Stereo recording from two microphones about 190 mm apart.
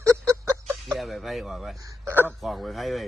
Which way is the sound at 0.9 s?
Centre (ahead or behind).